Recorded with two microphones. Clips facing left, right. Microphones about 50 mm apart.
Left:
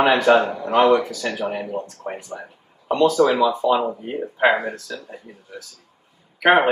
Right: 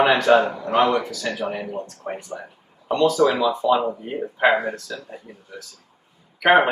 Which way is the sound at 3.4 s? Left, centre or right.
Centre.